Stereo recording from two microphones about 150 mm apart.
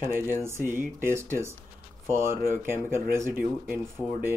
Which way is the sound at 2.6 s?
15° right (ahead or behind).